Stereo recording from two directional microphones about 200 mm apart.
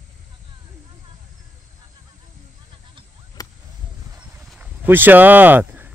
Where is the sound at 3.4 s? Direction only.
20° left (ahead or behind).